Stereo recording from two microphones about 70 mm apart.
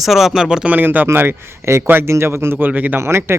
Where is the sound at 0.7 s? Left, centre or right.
Right.